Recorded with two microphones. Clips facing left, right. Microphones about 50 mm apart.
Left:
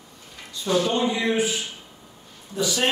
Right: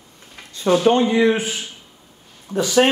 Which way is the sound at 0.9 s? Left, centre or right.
Right.